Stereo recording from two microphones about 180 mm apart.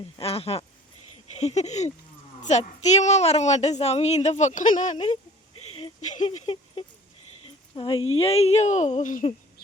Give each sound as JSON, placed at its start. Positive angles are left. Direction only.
{"t": 0.2, "sound": "a woman's voice", "side_deg": 35}